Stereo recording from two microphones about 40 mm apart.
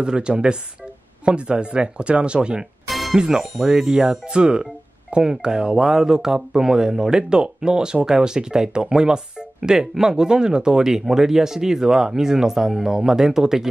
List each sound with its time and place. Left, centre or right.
0.0 s speech: right
2.9 s music: centre
3.2 s speech: centre